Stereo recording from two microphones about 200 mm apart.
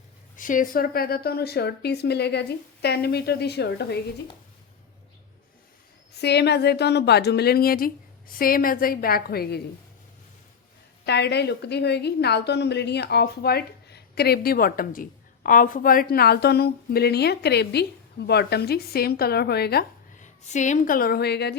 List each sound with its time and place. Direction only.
0.3 s a woman's voice: 40° left (ahead or behind)
6.1 s a woman's voice: 55° left (ahead or behind)
11.0 s a woman's voice: 55° left (ahead or behind)
20.1 s a woman's voice: 35° left (ahead or behind); by 21.5 s 55° left (ahead or behind)